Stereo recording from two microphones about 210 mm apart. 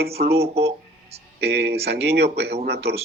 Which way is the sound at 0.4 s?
30° right (ahead or behind).